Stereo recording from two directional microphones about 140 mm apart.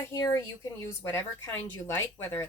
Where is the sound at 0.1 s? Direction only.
25° left (ahead or behind).